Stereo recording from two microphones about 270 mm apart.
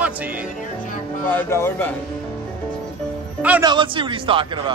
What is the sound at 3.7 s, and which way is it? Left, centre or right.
Speech, centre.